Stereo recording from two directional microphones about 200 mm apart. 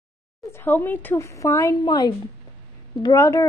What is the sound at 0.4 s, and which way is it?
A woman's voice, 10° left (ahead or behind).